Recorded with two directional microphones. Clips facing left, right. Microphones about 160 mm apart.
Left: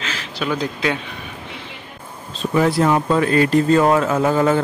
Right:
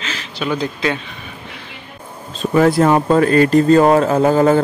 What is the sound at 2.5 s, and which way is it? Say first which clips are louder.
Speech: right 4 dB; 50° right (ahead or behind).